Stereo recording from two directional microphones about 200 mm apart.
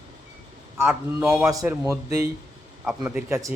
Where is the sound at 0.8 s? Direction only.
5° right (ahead or behind).